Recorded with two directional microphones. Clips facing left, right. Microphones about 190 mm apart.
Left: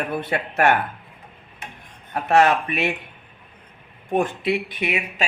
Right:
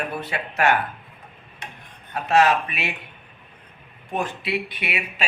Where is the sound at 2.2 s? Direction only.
55° left (ahead or behind).